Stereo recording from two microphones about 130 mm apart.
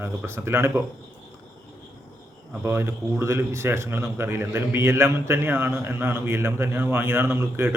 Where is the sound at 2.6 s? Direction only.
20° right (ahead or behind).